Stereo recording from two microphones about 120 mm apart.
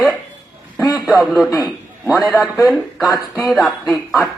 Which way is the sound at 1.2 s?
Centre (ahead or behind).